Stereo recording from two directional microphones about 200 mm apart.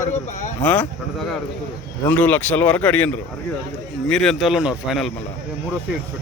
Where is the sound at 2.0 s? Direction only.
10° left (ahead or behind).